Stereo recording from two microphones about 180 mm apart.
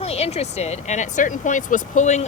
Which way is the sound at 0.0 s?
35° left (ahead or behind).